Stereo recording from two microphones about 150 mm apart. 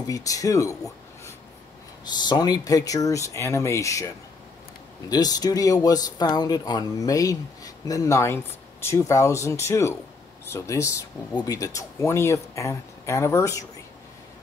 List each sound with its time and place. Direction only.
0.0 s speech: 25° left (ahead or behind)
2.2 s speech: 25° left (ahead or behind)
5.1 s speech: 25° left (ahead or behind)